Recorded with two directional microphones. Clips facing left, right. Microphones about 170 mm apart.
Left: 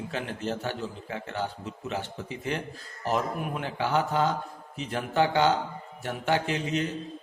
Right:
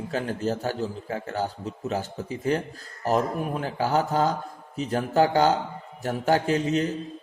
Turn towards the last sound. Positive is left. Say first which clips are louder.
# right 5 dB
turn(degrees=-40)  # may be behind; listen again after turning